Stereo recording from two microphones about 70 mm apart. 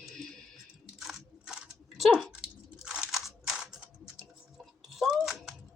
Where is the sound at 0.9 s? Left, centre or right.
Centre.